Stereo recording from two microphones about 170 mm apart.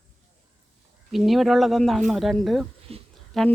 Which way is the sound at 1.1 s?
Centre (ahead or behind).